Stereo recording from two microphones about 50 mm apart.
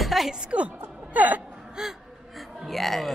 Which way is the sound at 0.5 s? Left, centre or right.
Right.